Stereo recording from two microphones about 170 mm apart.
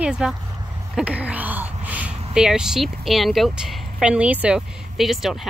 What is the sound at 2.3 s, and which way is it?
Speech, 5° right (ahead or behind).